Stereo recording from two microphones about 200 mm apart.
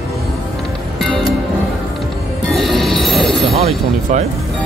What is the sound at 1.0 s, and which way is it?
Music, centre (ahead or behind).